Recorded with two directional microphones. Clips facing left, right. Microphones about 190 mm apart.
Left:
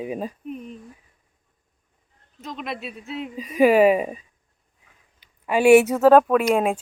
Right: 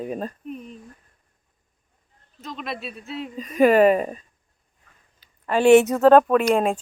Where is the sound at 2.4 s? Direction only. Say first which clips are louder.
Left 1 dB; 15° left (ahead or behind).